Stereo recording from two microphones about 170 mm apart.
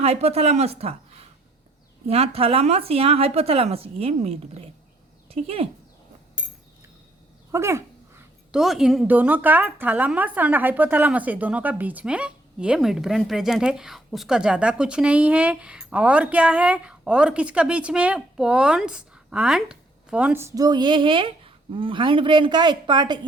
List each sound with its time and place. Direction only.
0.0 s a woman's voice: 40° right (ahead or behind)
2.0 s a woman's voice: 35° right (ahead or behind)
7.5 s dog: 15° right (ahead or behind)
8.5 s a woman's voice: centre (ahead or behind); by 23.2 s 25° right (ahead or behind)